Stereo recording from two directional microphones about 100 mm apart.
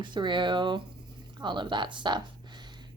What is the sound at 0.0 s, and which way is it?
Speech, 50° right (ahead or behind).